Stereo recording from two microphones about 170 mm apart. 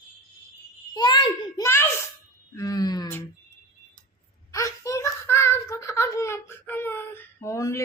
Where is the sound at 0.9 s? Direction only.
25° left (ahead or behind).